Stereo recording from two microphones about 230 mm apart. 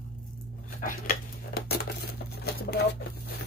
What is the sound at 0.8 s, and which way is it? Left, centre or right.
Dishes, left.